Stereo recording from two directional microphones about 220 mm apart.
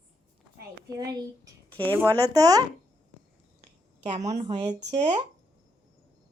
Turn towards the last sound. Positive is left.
turn(degrees=-30)  # may be behind; listen again after turning